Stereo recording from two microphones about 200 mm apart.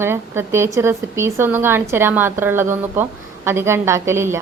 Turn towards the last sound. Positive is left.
turn(degrees=-15)  # may be behind; listen again after turning